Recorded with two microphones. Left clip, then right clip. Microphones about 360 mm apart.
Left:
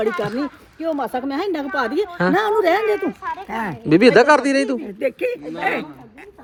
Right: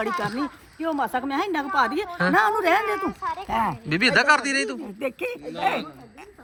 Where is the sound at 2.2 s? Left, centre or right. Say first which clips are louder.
Even; centre.